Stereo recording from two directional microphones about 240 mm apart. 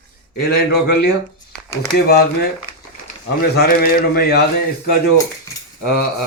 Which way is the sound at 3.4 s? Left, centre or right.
Left.